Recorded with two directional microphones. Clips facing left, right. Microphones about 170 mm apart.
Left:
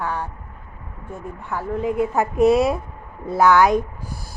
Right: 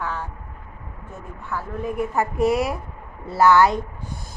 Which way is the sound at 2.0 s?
20° left (ahead or behind).